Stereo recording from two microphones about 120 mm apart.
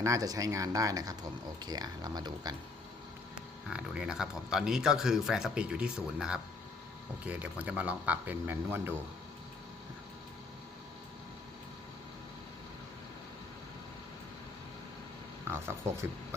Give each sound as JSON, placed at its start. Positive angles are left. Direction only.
{"t": 0.0, "sound": "speech", "side_deg": -30}
{"t": 3.7, "sound": "speech", "side_deg": -5}
{"t": 15.4, "sound": "speech", "side_deg": -20}